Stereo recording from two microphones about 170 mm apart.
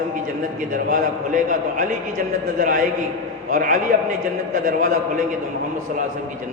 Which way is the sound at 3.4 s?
50° right (ahead or behind).